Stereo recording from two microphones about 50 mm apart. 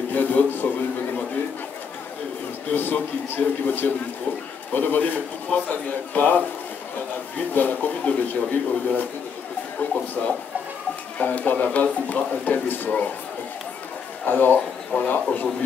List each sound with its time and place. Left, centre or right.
0.1 s a sound: left
2.7 s a man's voice: left
14.2 s speech: left